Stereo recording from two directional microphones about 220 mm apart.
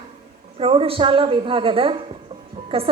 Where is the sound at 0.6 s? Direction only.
25° right (ahead or behind).